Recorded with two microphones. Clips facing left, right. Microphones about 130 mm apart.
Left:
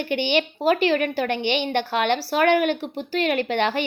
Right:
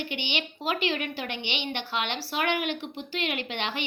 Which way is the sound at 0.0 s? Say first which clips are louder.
Left 10 dB; 45° left (ahead or behind).